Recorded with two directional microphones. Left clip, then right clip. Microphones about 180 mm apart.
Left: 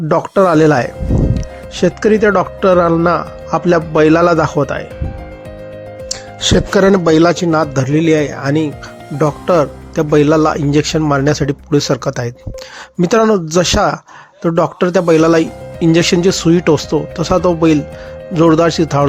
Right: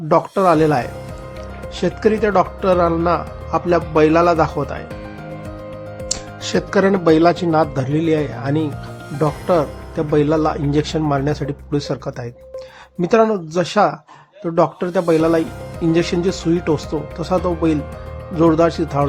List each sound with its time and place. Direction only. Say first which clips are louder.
0.1 s speech: left 3 dB; 25° left (ahead or behind)
6.4 s speech: left 6 dB; 40° left (ahead or behind); by 19.0 s 20° left (ahead or behind)